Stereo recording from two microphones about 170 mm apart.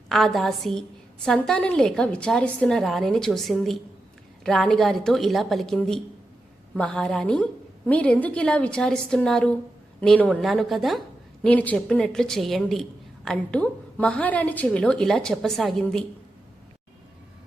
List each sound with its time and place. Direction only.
0.1 s a woman's voice: centre (ahead or behind)